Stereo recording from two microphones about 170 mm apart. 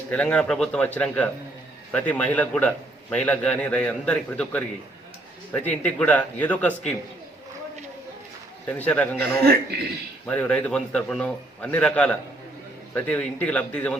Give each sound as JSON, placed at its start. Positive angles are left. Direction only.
{"t": 0.1, "sound": "a man's voice", "side_deg": 5}
{"t": 8.6, "sound": "a man's voice", "side_deg": 10}
{"t": 9.4, "sound": "speech", "side_deg": -65}
{"t": 10.2, "sound": "a man's voice", "side_deg": 5}